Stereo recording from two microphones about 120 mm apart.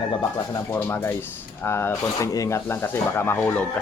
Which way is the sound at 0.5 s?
20° left (ahead or behind).